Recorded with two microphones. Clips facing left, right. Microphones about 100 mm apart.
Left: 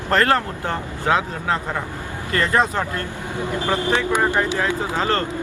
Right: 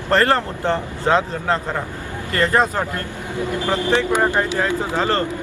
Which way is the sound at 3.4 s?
20° left (ahead or behind).